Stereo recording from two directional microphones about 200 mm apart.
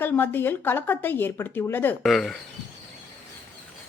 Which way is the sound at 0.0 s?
10° left (ahead or behind).